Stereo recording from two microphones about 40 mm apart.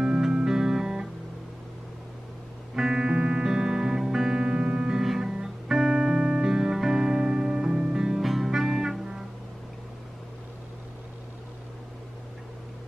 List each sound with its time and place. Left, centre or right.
0.0 s music: centre
2.7 s music: centre
4.4 s music: right
4.9 s music: centre